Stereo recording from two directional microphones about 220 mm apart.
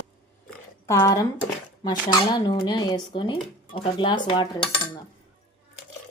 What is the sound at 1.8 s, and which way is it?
Speech, 20° left (ahead or behind).